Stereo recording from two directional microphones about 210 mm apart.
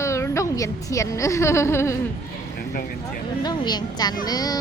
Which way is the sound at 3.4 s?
20° left (ahead or behind).